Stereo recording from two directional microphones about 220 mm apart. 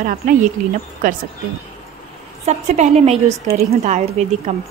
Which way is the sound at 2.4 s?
30° right (ahead or behind).